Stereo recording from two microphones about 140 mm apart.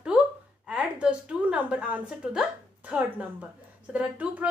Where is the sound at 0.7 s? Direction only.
10° right (ahead or behind).